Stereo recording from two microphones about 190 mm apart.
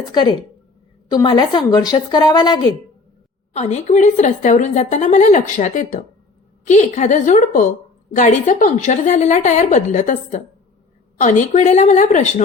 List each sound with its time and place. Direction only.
0.1 s a woman's voice: 20° left (ahead or behind)
3.5 s a woman's voice: 35° left (ahead or behind)